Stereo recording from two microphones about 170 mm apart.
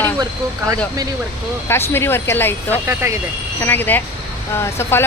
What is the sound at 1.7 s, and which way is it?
Speech, 15° left (ahead or behind).